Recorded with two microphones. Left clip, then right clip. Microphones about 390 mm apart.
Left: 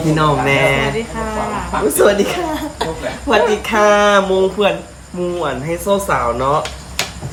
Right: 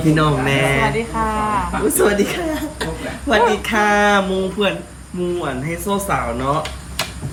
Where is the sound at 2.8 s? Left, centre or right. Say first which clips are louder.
Left 4 dB; centre.